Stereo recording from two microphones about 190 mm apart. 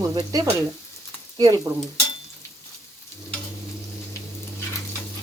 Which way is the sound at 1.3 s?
20° right (ahead or behind).